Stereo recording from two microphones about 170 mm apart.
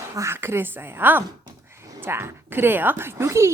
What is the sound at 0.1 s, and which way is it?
A woman's voice, 15° right (ahead or behind).